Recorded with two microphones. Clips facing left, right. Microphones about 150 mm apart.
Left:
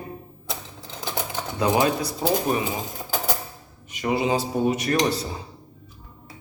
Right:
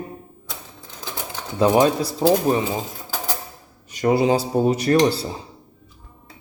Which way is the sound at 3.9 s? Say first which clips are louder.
Right 5 dB; 40° right (ahead or behind).